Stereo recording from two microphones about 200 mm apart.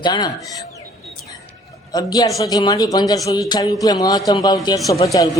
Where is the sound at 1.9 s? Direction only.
20° left (ahead or behind).